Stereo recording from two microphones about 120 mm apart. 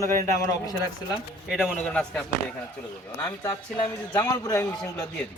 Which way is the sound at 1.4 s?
5° right (ahead or behind).